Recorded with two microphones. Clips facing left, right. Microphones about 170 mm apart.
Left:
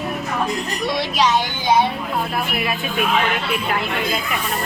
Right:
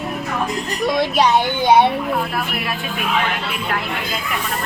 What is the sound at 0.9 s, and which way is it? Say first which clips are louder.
Speech: right 3 dB; 55° right (ahead or behind).